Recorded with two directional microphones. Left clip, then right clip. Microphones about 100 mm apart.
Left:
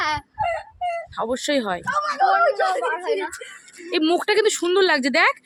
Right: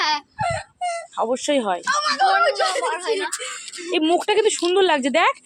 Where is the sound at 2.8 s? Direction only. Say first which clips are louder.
Right 1 dB; 15° left (ahead or behind).